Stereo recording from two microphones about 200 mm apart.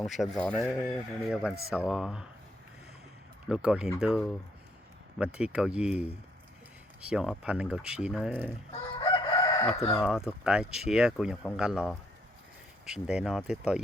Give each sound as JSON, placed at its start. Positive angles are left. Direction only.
{"t": 0.0, "sound": "speech", "side_deg": 0}
{"t": 3.5, "sound": "speech", "side_deg": -5}
{"t": 9.0, "sound": "chicken", "side_deg": 20}
{"t": 9.7, "sound": "speech", "side_deg": 15}
{"t": 10.0, "sound": "speech", "side_deg": -5}